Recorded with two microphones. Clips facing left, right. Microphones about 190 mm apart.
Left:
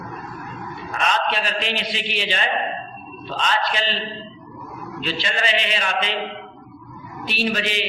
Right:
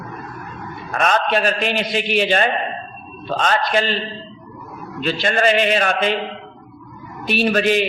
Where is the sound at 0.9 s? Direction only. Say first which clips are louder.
Right 5 dB; 50° right (ahead or behind).